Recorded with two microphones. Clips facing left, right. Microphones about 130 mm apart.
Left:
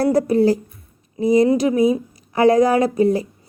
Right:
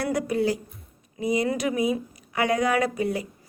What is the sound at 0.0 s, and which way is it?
A woman's voice, 35° left (ahead or behind).